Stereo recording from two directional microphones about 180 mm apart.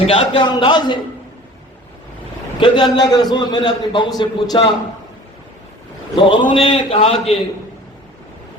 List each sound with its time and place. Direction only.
0.1 s a man's voice: 30° left (ahead or behind)
2.6 s a man's voice: 25° left (ahead or behind)
6.1 s a man's voice: 30° left (ahead or behind)